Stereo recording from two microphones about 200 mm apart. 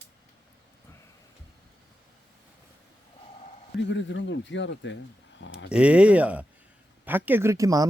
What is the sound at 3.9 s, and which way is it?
Speech, 65° left (ahead or behind).